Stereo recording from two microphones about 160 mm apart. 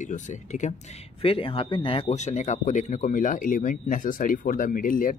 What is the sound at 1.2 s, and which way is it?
Speech, 35° left (ahead or behind).